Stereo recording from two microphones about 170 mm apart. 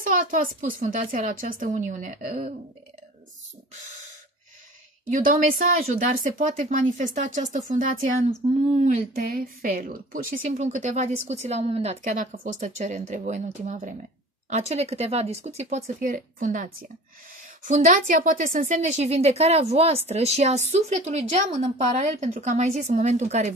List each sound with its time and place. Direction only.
0.0 s a woman's voice: 55° right (ahead or behind)
5.1 s a woman's voice: 50° right (ahead or behind)
9.1 s a woman's voice: 60° right (ahead or behind); by 23.5 s 40° right (ahead or behind)